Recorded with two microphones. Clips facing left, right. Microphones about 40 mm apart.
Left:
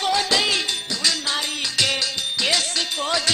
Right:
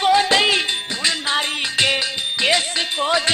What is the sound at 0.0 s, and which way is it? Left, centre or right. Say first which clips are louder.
Music: right 5 dB; right.